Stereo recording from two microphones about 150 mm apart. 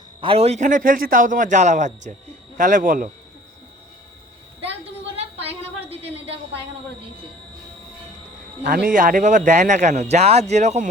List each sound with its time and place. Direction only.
0.2 s a man's voice: 40° right (ahead or behind); by 3.1 s 60° right (ahead or behind)
5.1 s a sound: 40° right (ahead or behind)
8.9 s speech: 65° right (ahead or behind); by 10.8 s 50° right (ahead or behind)